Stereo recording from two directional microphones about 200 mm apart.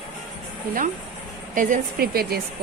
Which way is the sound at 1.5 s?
45° right (ahead or behind).